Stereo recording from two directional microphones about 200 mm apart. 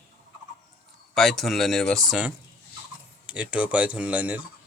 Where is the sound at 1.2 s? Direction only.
Centre (ahead or behind).